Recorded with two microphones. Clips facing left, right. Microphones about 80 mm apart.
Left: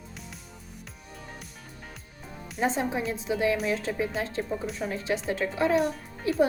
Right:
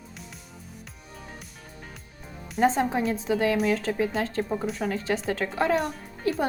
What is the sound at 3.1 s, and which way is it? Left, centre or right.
Speech, right.